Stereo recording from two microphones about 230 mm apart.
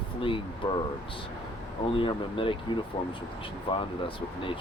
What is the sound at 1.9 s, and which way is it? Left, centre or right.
Speech, left.